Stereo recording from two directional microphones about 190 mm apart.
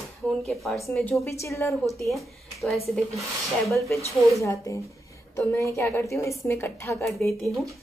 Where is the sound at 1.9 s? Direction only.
Centre (ahead or behind).